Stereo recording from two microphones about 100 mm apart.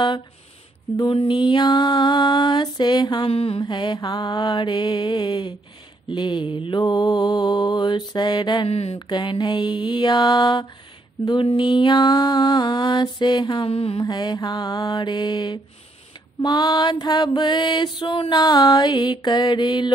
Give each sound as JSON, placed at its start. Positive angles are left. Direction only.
{"t": 0.9, "sound": "mantra", "side_deg": 55}
{"t": 3.3, "sound": "mantra", "side_deg": 70}
{"t": 3.6, "sound": "mantra", "side_deg": 50}
{"t": 8.6, "sound": "speech", "side_deg": 90}
{"t": 8.9, "sound": "mantra", "side_deg": 50}
{"t": 11.2, "sound": "mantra", "side_deg": 60}
{"t": 13.7, "sound": "mantra", "side_deg": 75}
{"t": 14.0, "sound": "mantra", "side_deg": 45}